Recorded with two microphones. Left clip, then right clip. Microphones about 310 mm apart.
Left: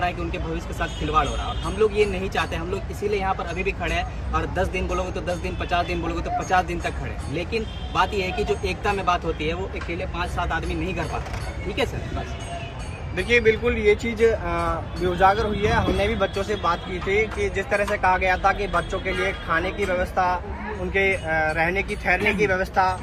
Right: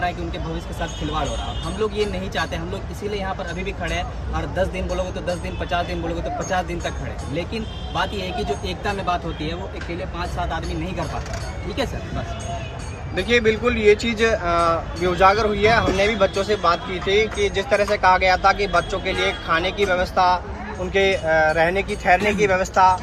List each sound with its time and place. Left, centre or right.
1.8 s speech: centre
13.1 s speech: right
22.0 s speech: right